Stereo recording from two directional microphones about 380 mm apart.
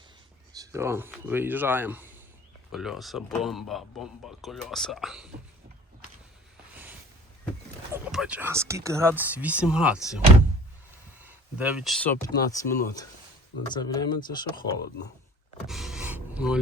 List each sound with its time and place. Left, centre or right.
0.5 s speech: centre
7.9 s speech: centre
11.2 s speech: centre
15.6 s gasp: centre